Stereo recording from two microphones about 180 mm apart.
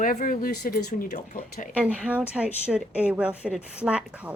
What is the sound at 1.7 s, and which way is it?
Speech, 10° right (ahead or behind).